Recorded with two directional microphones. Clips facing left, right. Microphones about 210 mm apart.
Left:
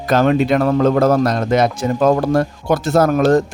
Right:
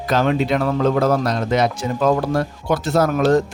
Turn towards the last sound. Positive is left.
turn(degrees=45)  # may be behind; listen again after turning